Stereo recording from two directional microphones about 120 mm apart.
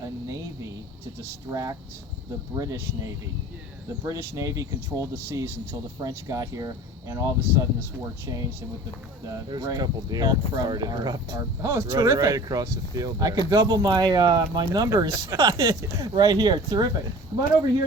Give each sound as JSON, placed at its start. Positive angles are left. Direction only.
{"t": 1.2, "sound": "speech", "side_deg": -25}
{"t": 9.2, "sound": "speech", "side_deg": -30}